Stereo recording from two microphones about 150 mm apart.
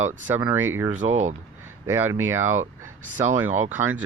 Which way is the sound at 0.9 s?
50° right (ahead or behind).